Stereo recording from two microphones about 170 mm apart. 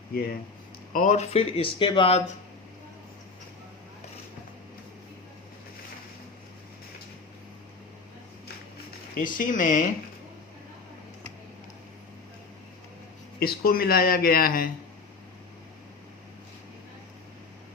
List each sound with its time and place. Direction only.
0.1 s speech: 65° left (ahead or behind)
0.9 s speech: 45° left (ahead or behind)
9.1 s speech: 50° left (ahead or behind)
13.4 s speech: 60° left (ahead or behind)